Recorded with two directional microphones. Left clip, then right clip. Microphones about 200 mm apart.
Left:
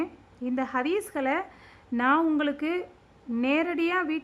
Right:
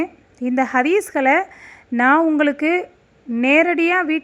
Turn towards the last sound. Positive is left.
turn(degrees=-20)  # may be behind; listen again after turning